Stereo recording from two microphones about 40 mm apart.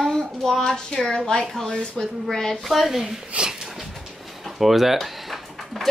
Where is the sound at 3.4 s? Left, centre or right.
Centre.